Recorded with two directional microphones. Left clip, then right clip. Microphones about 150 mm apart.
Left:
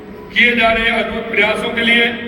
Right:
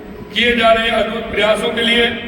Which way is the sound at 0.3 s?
25° right (ahead or behind).